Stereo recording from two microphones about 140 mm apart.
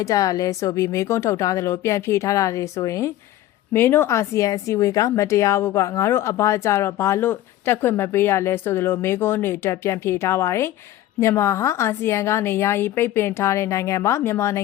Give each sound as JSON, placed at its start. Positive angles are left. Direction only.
{"t": 0.0, "sound": "speech", "side_deg": 25}